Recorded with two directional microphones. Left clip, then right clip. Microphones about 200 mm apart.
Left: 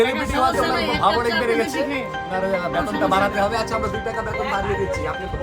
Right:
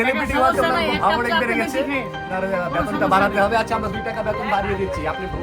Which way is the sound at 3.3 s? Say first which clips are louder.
Right 3 dB; 20° right (ahead or behind).